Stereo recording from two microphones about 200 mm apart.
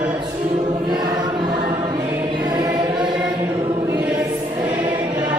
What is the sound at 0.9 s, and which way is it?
Choir, 20° right (ahead or behind).